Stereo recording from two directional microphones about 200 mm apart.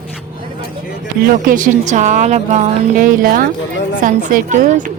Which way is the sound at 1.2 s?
40° right (ahead or behind).